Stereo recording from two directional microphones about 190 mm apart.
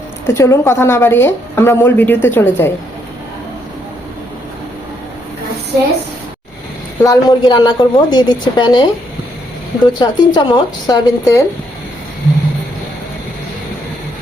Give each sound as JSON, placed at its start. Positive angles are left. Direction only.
{"t": 0.3, "sound": "a woman's voice", "side_deg": 15}
{"t": 7.0, "sound": "a woman's voice", "side_deg": 20}